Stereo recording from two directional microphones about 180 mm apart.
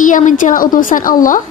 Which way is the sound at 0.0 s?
45° left (ahead or behind).